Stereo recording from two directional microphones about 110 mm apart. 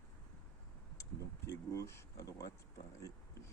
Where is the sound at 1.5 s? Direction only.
25° left (ahead or behind).